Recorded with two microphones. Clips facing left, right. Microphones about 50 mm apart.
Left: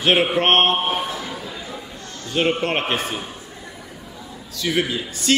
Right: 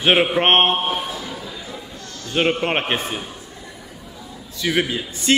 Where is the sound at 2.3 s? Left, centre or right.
Right.